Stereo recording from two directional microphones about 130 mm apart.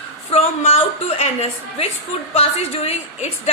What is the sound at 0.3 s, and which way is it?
A woman's voice, 50° left (ahead or behind).